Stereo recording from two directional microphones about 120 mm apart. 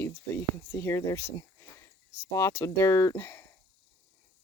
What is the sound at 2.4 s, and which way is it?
Speech, 25° left (ahead or behind).